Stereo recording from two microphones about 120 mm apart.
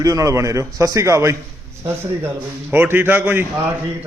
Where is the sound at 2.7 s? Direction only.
15° right (ahead or behind).